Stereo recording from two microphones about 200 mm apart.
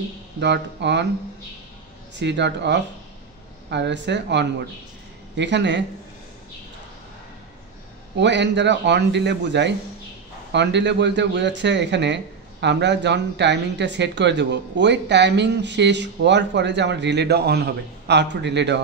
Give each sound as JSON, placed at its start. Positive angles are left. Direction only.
{"t": 0.4, "sound": "a man's voice", "side_deg": -60}
{"t": 2.1, "sound": "a man's voice", "side_deg": -60}
{"t": 8.2, "sound": "a man's voice", "side_deg": -60}